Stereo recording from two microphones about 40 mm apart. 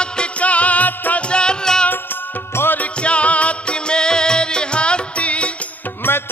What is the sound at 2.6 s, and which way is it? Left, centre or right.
Music, left.